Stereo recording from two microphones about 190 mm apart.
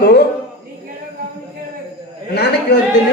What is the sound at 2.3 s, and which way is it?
Speech, 60° left (ahead or behind).